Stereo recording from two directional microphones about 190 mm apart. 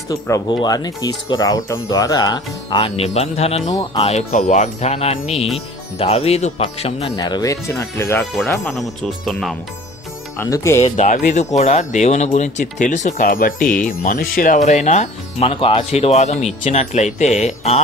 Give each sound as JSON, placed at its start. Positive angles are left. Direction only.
{"t": 0.1, "sound": "speech", "side_deg": 20}
{"t": 3.7, "sound": "speech", "side_deg": 20}
{"t": 4.0, "sound": "speech", "side_deg": 35}
{"t": 9.0, "sound": "speech", "side_deg": 0}
{"t": 10.3, "sound": "speech", "side_deg": 15}
{"t": 10.9, "sound": "speech", "side_deg": 40}